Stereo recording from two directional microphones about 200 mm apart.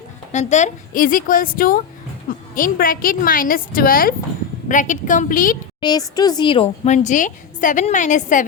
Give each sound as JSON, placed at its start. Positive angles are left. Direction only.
{"t": 0.3, "sound": "a woman's voice", "side_deg": 35}
{"t": 5.8, "sound": "a woman's voice", "side_deg": 20}